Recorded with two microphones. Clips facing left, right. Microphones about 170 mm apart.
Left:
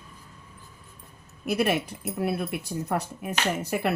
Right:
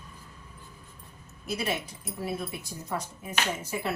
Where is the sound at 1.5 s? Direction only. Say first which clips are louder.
Left 7 dB; 60° left (ahead or behind).